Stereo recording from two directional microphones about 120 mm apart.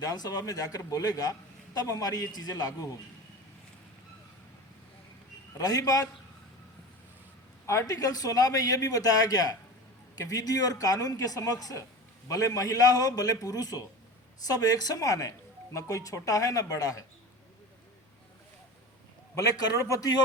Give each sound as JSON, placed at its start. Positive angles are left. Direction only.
{"t": 0.0, "sound": "a man's voice", "side_deg": 35}
{"t": 5.5, "sound": "a man's voice", "side_deg": 30}
{"t": 7.7, "sound": "a man's voice", "side_deg": 30}
{"t": 19.5, "sound": "a man's voice", "side_deg": 30}